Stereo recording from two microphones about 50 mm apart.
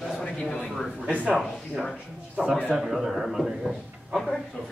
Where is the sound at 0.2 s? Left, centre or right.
Centre.